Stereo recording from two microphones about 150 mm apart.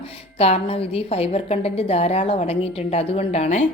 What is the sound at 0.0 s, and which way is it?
A woman's voice, 40° left (ahead or behind).